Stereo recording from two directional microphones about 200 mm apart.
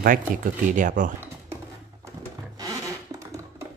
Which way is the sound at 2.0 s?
15° right (ahead or behind).